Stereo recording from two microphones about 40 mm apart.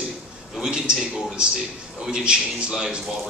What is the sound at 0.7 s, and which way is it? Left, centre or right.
Speech, right.